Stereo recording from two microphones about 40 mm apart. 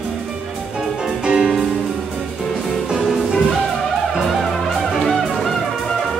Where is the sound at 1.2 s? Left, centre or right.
Right.